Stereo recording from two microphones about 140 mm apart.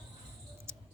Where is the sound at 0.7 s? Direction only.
15° right (ahead or behind).